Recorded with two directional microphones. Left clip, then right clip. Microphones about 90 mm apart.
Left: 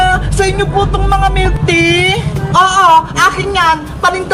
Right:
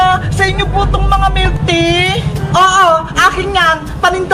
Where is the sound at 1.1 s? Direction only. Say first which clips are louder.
Even; 45° right (ahead or behind).